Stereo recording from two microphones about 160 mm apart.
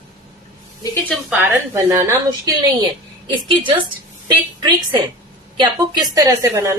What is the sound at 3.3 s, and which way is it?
A woman's voice, 30° right (ahead or behind).